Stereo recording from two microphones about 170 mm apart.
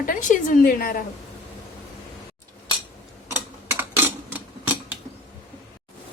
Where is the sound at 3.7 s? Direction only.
10° right (ahead or behind).